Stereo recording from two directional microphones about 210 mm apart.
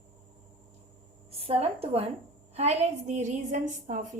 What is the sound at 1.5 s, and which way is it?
A woman's voice, 30° right (ahead or behind).